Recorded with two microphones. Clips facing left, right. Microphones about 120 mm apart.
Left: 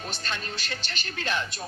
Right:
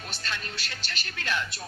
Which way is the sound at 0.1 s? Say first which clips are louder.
Right 1 dB; 25° left (ahead or behind).